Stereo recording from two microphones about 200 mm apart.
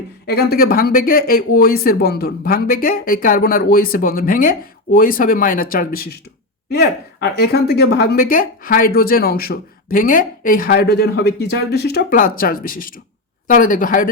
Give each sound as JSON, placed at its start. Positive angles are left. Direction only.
{"t": 0.3, "sound": "speech", "side_deg": 50}